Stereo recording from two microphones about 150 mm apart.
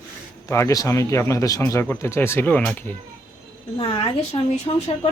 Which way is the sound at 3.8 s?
40° left (ahead or behind).